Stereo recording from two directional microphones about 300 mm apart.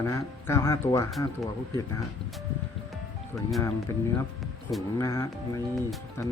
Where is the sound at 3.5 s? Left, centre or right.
Centre.